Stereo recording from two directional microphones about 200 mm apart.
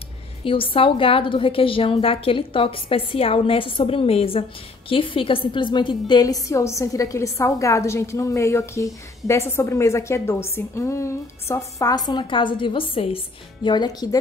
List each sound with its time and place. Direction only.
0.4 s a woman's voice: 25° left (ahead or behind)